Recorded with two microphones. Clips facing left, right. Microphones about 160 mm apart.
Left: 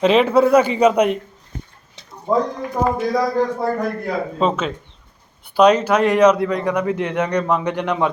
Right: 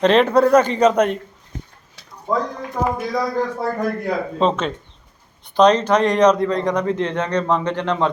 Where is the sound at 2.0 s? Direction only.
25° left (ahead or behind).